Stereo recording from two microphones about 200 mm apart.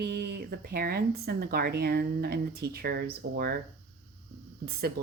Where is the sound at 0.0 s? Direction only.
55° right (ahead or behind).